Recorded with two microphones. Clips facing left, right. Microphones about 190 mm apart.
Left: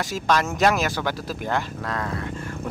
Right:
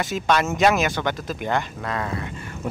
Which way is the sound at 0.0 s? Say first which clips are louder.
Right 1 dB; centre (ahead or behind).